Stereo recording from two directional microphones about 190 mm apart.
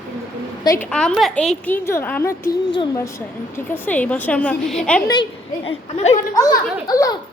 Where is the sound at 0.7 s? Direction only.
10° left (ahead or behind).